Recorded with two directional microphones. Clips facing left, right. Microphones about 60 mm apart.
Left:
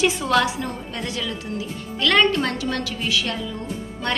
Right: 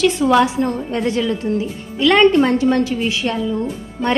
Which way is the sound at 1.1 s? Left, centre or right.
Right.